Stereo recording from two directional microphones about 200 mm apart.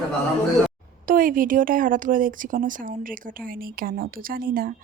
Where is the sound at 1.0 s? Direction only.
45° right (ahead or behind).